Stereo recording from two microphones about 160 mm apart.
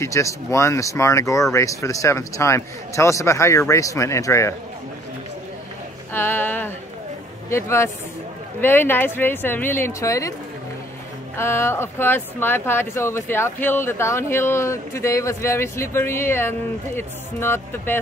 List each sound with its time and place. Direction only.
0.0 s a man's voice: 20° left (ahead or behind)
6.1 s speech: 15° left (ahead or behind)
11.3 s speech: 15° left (ahead or behind)